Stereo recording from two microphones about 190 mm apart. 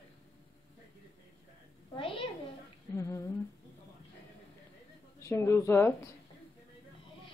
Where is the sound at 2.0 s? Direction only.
30° left (ahead or behind).